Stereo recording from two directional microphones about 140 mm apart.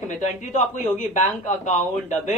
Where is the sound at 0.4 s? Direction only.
60° left (ahead or behind).